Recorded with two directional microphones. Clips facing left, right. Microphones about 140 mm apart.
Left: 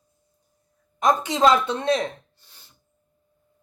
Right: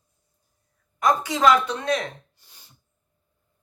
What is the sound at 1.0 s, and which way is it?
Speech, 25° left (ahead or behind).